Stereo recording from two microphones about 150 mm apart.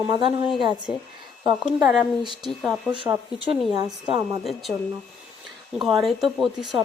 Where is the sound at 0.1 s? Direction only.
35° right (ahead or behind).